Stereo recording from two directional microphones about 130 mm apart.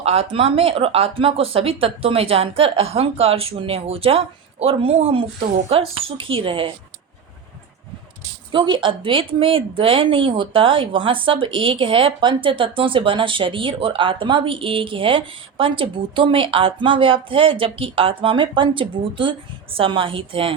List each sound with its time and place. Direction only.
0.0 s speech: 55° right (ahead or behind)
8.5 s speech: 40° right (ahead or behind)